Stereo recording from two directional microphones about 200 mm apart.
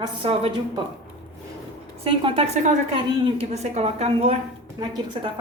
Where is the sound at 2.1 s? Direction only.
25° right (ahead or behind).